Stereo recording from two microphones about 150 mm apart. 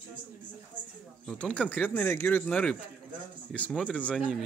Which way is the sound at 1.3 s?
5° left (ahead or behind).